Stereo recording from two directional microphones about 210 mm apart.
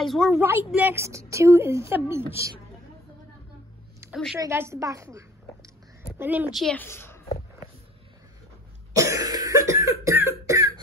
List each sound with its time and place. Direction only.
0.0 s a woman's voice: centre (ahead or behind)
0.4 s a woman's voice: 10° right (ahead or behind)
4.0 s a sound: 10° right (ahead or behind)
4.4 s a woman's voice: 15° right (ahead or behind); by 7.2 s 10° left (ahead or behind)
8.9 s cough: 15° right (ahead or behind)